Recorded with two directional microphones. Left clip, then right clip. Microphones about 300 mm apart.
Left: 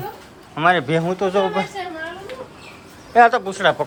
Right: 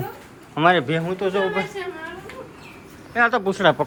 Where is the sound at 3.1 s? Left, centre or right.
Centre.